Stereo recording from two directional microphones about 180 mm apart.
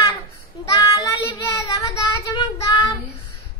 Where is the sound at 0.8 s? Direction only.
25° left (ahead or behind).